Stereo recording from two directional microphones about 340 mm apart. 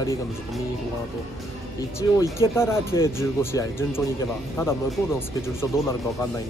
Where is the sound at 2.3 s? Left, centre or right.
Centre.